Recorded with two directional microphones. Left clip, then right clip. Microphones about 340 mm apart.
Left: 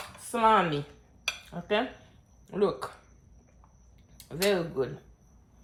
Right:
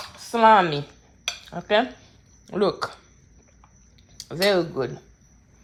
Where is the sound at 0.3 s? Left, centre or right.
Right.